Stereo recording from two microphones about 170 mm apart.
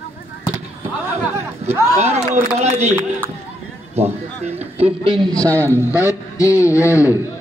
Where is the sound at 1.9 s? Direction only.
40° right (ahead or behind).